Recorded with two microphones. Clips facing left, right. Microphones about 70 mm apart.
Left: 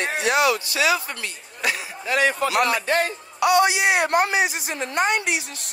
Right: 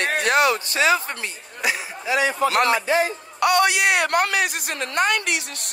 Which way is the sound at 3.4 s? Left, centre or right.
Right.